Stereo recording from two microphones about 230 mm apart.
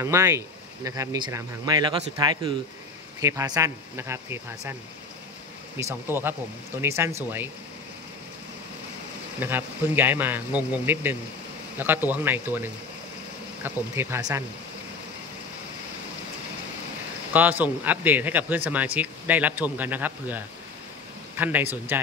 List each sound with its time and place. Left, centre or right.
0.0 s speech: centre
5.8 s speech: centre
9.4 s speech: centre
13.7 s speech: centre
17.3 s speech: centre